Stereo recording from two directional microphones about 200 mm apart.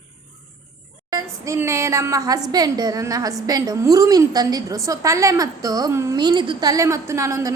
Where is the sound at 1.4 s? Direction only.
15° right (ahead or behind).